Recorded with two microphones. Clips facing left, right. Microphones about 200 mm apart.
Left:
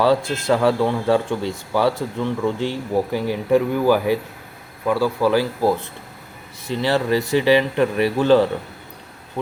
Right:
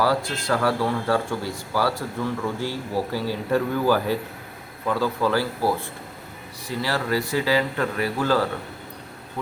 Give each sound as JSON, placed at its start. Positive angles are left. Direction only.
{"t": 0.0, "sound": "speech", "side_deg": 25}